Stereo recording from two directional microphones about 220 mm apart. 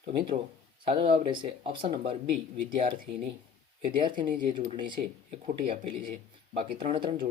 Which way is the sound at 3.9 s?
20° right (ahead or behind).